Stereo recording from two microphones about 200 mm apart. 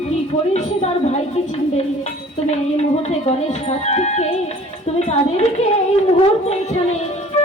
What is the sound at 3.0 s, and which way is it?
Speech, 30° left (ahead or behind).